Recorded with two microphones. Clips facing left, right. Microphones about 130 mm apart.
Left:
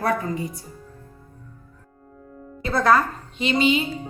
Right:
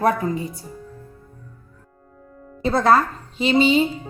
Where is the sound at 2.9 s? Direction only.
30° right (ahead or behind).